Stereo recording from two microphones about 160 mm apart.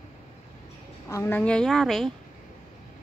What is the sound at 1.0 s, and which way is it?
Speech, 15° left (ahead or behind).